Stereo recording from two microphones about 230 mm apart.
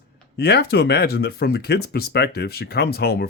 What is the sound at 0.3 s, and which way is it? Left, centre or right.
Speech, left.